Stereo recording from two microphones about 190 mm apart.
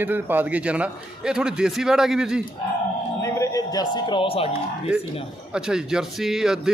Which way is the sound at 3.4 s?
20° left (ahead or behind).